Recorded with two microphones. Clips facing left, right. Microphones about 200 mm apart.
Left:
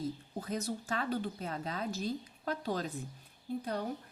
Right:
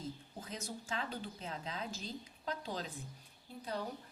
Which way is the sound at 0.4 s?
60° left (ahead or behind).